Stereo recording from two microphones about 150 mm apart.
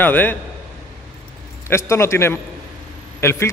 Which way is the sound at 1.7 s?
20° left (ahead or behind).